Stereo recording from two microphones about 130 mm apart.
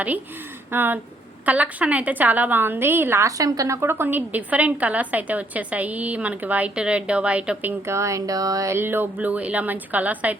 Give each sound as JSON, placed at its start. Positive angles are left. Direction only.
{"t": 0.7, "sound": "a woman's voice", "side_deg": -15}